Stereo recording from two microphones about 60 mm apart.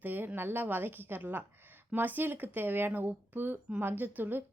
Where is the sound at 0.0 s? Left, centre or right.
Right.